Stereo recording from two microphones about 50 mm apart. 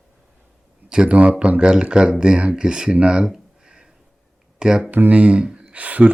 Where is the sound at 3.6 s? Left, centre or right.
Centre.